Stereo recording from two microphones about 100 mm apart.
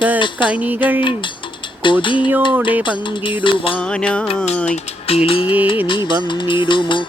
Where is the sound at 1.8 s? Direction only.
55° left (ahead or behind).